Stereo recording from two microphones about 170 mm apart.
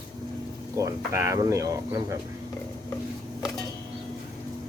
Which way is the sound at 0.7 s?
15° right (ahead or behind).